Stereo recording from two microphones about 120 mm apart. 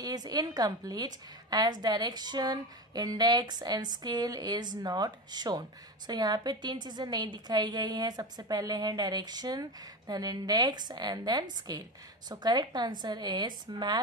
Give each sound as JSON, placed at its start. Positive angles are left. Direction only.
{"t": 0.0, "sound": "a woman's voice", "side_deg": -35}